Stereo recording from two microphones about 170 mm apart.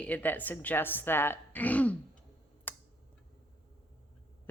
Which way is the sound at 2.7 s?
10° left (ahead or behind).